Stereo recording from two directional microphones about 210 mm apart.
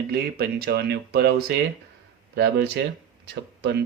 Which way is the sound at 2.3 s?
55° right (ahead or behind).